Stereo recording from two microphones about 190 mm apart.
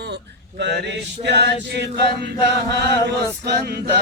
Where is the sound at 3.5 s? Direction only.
60° right (ahead or behind).